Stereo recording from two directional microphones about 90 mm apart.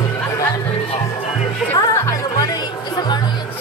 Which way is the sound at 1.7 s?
35° left (ahead or behind).